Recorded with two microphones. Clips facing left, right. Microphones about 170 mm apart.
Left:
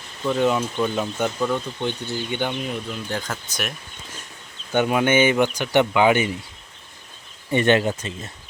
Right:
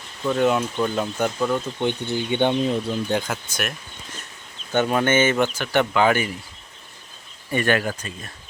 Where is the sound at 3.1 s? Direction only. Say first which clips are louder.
Right 4 dB; 20° right (ahead or behind).